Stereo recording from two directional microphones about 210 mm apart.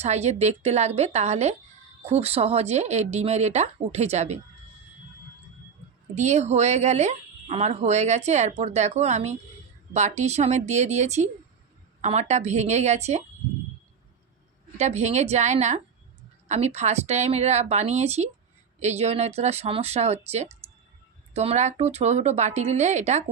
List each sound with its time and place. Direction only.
0.0 s speech: 30° right (ahead or behind)
6.1 s speech: 35° right (ahead or behind)
14.8 s speech: 30° right (ahead or behind)